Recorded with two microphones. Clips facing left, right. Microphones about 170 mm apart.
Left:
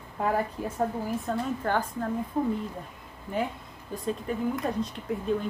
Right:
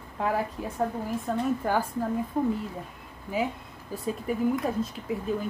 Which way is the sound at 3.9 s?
5° right (ahead or behind).